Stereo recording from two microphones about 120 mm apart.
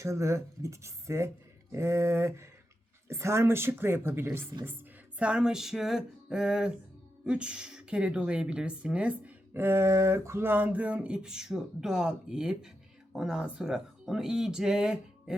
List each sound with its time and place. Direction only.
0.0 s speech: 25° right (ahead or behind)
5.2 s speech: 5° right (ahead or behind)